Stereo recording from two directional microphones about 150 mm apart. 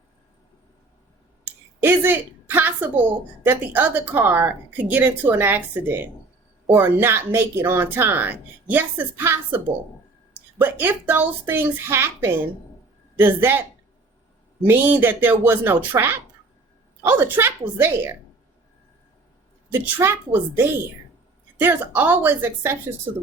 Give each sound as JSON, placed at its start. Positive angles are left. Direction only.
{"t": 1.8, "sound": "a woman's voice", "side_deg": -15}
{"t": 14.6, "sound": "speech", "side_deg": -10}
{"t": 20.0, "sound": "speech", "side_deg": -15}
{"t": 21.6, "sound": "speech", "side_deg": -15}